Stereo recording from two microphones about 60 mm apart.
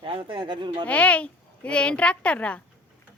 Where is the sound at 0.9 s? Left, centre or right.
Left.